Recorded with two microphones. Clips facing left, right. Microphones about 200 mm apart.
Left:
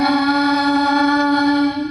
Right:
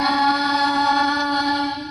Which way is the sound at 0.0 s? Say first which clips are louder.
Left 6 dB; 55° left (ahead or behind).